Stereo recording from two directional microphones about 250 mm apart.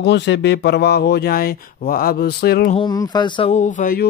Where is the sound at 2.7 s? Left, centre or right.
Centre; by 4.0 s left.